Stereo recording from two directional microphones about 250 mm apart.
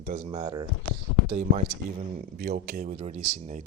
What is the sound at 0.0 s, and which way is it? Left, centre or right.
Speech, right.